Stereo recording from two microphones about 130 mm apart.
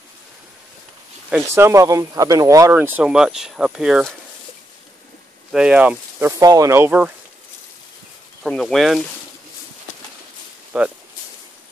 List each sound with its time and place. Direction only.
1.3 s speech: 20° right (ahead or behind)
2.7 s speech: 15° right (ahead or behind)
5.5 s speech: 5° right (ahead or behind)
6.2 s speech: 25° right (ahead or behind)
8.5 s speech: centre (ahead or behind)
10.7 s speech: 5° right (ahead or behind)